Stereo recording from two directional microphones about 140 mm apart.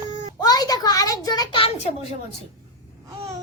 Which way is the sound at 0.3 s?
30° left (ahead or behind).